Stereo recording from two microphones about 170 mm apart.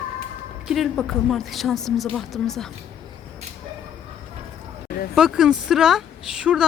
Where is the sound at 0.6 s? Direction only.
Centre (ahead or behind).